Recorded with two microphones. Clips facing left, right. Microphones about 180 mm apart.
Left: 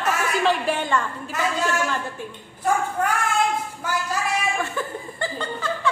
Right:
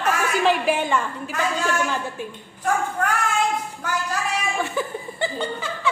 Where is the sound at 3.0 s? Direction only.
10° left (ahead or behind).